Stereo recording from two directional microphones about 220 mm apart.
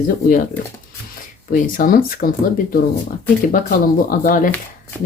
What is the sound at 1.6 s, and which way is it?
Speech, 40° left (ahead or behind).